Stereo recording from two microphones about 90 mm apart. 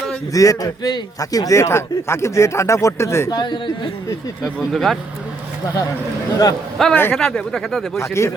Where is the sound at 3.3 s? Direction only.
55° left (ahead or behind).